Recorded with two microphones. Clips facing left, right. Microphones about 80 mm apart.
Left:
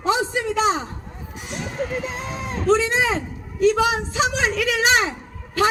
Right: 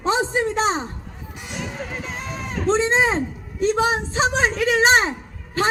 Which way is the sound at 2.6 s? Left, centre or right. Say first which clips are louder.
Even; right.